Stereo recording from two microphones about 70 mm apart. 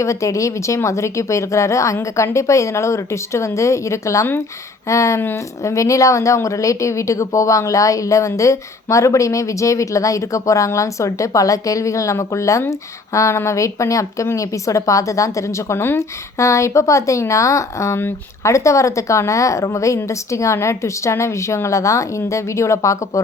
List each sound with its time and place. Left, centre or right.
0.0 s speech: left
16.4 s speech: left